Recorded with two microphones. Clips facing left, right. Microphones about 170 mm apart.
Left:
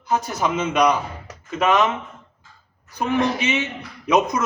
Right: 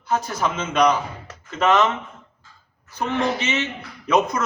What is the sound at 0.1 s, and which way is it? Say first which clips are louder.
A man's voice: left 1 dB; 15° left (ahead or behind).